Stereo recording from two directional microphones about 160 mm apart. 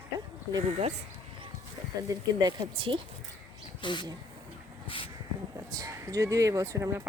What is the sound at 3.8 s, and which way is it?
Speech, 30° left (ahead or behind).